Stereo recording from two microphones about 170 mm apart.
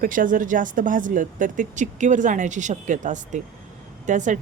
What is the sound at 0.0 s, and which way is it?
Speech, 50° right (ahead or behind).